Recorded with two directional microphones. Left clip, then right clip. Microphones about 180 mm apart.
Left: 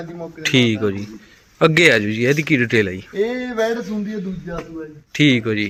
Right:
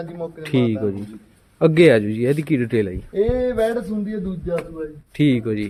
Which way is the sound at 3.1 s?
65° right (ahead or behind).